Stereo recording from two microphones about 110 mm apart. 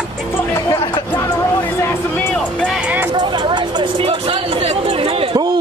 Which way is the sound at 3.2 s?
45° right (ahead or behind).